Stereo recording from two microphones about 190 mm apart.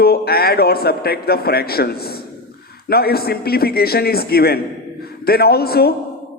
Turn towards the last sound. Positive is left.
turn(degrees=55)  # may be behind; listen again after turning